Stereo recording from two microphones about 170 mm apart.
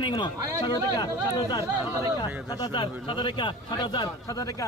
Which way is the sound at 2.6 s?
30° left (ahead or behind).